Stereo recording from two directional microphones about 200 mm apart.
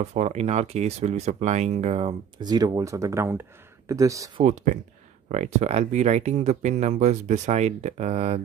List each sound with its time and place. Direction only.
0.0 s speech: 35° right (ahead or behind); by 4.3 s 15° right (ahead or behind)
4.4 s speech: 35° right (ahead or behind)